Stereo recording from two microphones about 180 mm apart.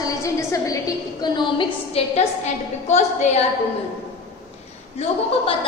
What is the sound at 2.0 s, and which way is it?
Speech, 35° left (ahead or behind).